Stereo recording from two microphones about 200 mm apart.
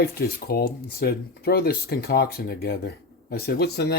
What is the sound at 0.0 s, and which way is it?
Speech, 50° left (ahead or behind).